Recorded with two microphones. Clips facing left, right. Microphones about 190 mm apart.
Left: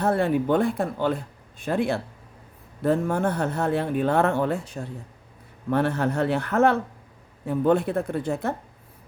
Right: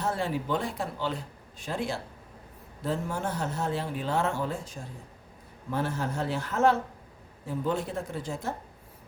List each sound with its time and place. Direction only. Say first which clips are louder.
0.0 s speech: left 8 dB; 60° left (ahead or behind)